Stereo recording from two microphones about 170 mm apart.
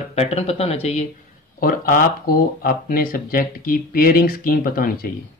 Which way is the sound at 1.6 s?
55° left (ahead or behind).